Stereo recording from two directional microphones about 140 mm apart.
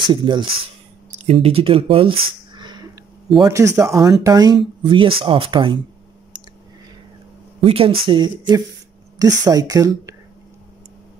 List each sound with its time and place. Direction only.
0.0 s speech: 35° right (ahead or behind)
1.1 s speech: 50° right (ahead or behind)
2.5 s a sound: 30° right (ahead or behind)
3.3 s speech: 25° right (ahead or behind)
7.6 s speech: 40° right (ahead or behind); by 10.1 s 25° right (ahead or behind)